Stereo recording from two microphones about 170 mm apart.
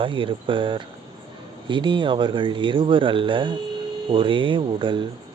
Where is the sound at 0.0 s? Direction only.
30° right (ahead or behind).